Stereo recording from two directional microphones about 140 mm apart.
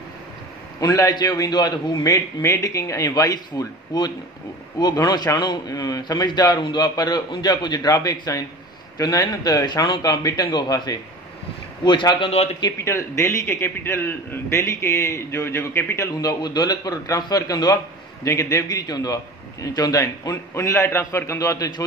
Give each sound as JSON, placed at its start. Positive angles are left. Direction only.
{"t": 0.7, "sound": "a man's voice", "side_deg": 25}
{"t": 12.8, "sound": "a man's voice", "side_deg": 20}